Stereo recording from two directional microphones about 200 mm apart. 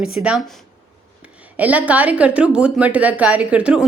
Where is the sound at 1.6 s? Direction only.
5° right (ahead or behind).